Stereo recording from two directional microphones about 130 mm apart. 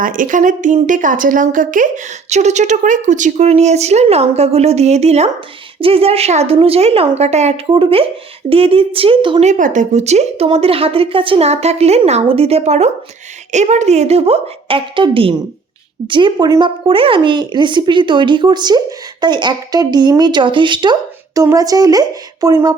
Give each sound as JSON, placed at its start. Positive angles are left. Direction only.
{"t": 0.0, "sound": "a woman's voice", "side_deg": -90}
{"t": 7.7, "sound": "a woman's voice", "side_deg": -45}
{"t": 9.4, "sound": "a woman's voice", "side_deg": -75}
{"t": 21.4, "sound": "speech", "side_deg": -25}